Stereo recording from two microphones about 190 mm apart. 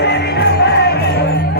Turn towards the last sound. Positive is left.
turn(degrees=60)  # may be behind; listen again after turning